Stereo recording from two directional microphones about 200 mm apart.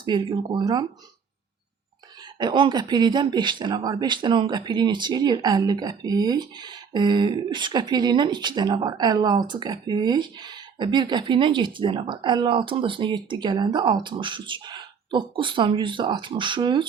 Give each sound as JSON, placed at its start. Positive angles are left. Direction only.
{"t": 0.0, "sound": "speech", "side_deg": -20}
{"t": 2.4, "sound": "speech", "side_deg": -20}